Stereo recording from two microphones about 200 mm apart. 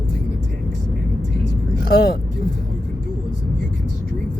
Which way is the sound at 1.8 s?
50° left (ahead or behind).